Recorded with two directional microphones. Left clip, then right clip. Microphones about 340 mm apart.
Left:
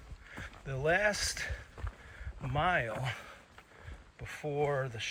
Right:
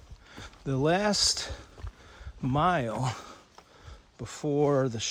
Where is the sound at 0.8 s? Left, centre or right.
Centre.